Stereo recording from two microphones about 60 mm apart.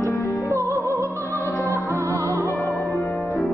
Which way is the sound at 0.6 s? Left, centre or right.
Right.